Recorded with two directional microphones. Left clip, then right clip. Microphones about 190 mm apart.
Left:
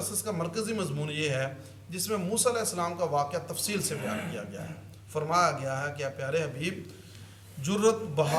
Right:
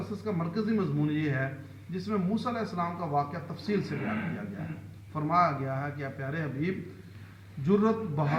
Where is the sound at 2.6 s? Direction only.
40° left (ahead or behind).